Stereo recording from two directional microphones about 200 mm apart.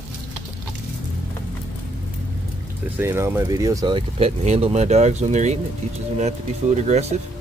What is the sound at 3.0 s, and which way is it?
Speech, 10° right (ahead or behind).